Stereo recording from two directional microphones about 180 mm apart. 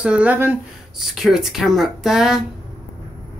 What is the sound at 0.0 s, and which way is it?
Speech, 5° right (ahead or behind).